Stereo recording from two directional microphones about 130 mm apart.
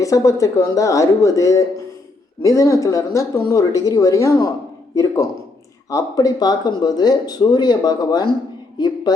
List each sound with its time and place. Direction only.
0.0 s speech: 25° left (ahead or behind)